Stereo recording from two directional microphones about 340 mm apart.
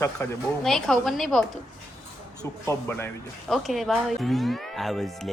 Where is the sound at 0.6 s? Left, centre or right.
Centre.